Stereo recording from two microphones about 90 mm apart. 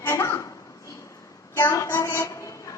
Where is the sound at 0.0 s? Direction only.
30° left (ahead or behind).